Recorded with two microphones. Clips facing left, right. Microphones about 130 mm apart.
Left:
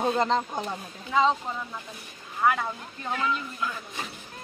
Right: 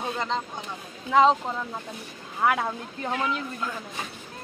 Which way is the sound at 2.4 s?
80° right.